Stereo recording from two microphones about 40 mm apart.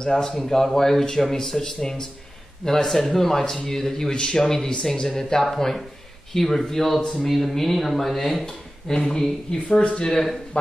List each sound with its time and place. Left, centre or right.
0.0 s speech: centre
8.9 s speech: left
9.2 s speech: centre
9.8 s speech: left